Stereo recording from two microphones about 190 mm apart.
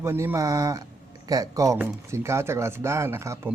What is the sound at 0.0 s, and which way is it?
A man's voice, 10° right (ahead or behind).